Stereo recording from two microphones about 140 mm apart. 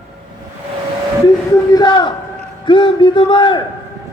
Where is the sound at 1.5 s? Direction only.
30° left (ahead or behind).